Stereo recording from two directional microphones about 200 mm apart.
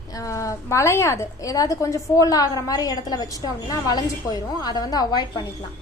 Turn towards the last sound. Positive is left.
turn(degrees=20)  # may be behind; listen again after turning